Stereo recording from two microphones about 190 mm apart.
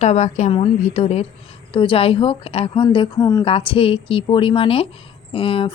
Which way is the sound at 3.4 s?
30° left (ahead or behind).